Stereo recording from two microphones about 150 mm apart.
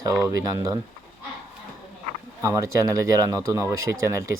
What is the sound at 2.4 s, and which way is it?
Speech, 20° right (ahead or behind).